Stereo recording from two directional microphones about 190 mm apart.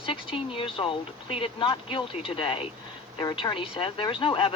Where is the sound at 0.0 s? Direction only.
25° left (ahead or behind).